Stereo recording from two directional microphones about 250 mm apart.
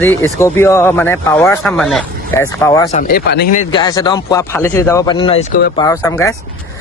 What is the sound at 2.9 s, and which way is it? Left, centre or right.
Speech, left.